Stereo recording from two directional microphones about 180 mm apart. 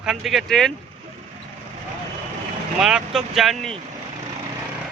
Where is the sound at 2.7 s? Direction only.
5° right (ahead or behind).